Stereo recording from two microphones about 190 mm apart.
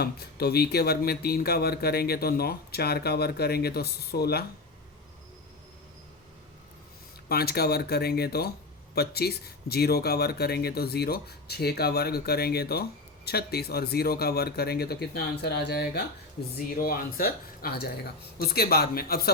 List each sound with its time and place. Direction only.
0.0 s speech: 55° left (ahead or behind)
7.3 s speech: 55° left (ahead or behind)
16.8 s speech: 50° left (ahead or behind)